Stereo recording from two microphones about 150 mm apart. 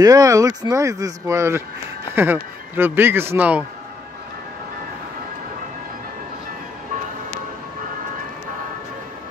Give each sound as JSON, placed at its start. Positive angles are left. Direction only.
{"t": 0.0, "sound": "speech", "side_deg": -25}